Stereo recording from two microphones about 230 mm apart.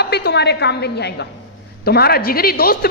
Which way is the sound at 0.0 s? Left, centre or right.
Left.